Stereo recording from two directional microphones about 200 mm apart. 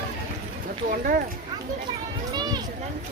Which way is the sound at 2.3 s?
20° right (ahead or behind).